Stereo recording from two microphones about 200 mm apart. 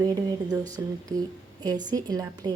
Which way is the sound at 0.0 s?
20° right (ahead or behind).